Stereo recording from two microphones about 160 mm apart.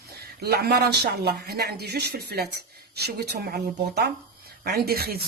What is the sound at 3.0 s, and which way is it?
Speech, 90° right.